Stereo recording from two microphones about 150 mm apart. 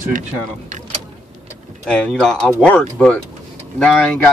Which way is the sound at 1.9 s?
5° left (ahead or behind).